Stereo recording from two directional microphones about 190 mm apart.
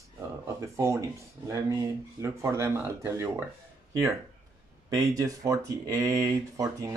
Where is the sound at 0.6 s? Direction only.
15° right (ahead or behind).